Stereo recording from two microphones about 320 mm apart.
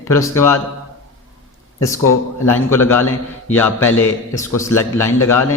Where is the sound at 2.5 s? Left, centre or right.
Centre.